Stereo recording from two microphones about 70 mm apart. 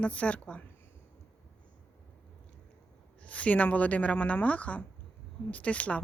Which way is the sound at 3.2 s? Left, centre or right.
Centre.